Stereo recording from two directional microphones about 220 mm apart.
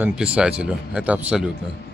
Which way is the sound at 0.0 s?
5° right (ahead or behind).